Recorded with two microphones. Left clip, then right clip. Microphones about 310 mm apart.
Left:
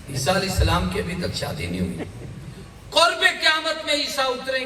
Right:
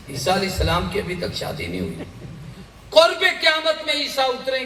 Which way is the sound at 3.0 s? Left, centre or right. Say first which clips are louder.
Right 3 dB; centre.